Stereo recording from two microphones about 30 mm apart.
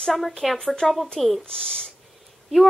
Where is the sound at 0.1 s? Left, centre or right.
Centre.